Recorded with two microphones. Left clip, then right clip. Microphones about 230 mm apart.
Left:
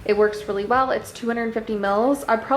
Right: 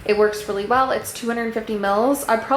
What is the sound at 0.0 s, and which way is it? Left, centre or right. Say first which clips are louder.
A woman's voice: right 1 dB; centre.